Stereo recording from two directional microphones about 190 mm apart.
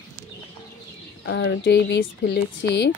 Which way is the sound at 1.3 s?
60° left (ahead or behind).